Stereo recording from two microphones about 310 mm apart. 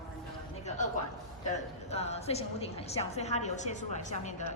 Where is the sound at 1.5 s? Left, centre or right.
Left.